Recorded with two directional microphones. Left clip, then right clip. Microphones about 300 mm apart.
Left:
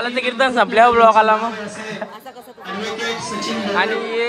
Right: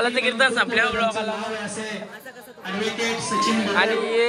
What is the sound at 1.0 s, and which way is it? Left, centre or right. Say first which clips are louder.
Speech: left 12 dB; left.